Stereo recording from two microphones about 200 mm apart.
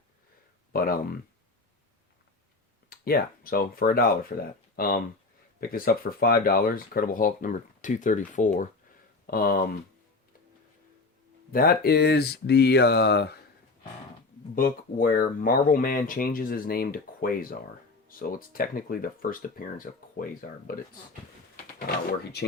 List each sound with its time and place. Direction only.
0.7 s speech: 50° left (ahead or behind)
2.9 s speech: 50° left (ahead or behind)
11.5 s speech: 50° left (ahead or behind)
14.5 s speech: 45° left (ahead or behind)
21.5 s a sound: 50° left (ahead or behind)